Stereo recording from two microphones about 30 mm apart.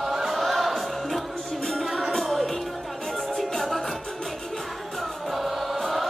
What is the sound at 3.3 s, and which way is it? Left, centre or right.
Music, centre.